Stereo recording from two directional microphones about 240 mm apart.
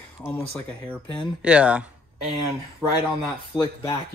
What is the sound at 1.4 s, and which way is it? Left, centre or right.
Speech, centre.